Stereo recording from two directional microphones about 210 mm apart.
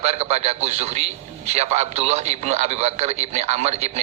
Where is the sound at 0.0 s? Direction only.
30° right (ahead or behind).